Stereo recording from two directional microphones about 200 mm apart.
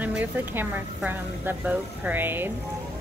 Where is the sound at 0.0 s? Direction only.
10° right (ahead or behind).